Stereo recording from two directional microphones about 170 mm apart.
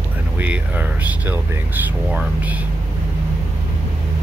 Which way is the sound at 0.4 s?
10° right (ahead or behind).